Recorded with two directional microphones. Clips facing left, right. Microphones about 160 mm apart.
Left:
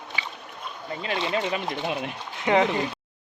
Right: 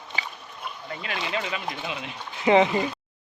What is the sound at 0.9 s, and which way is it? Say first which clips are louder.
Speech: left 4 dB; 30° left (ahead or behind).